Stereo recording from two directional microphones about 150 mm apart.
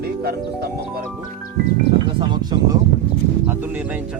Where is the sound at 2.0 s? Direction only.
30° right (ahead or behind).